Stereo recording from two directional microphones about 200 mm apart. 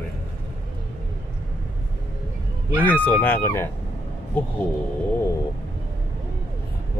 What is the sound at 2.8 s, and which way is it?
Speech, 10° left (ahead or behind).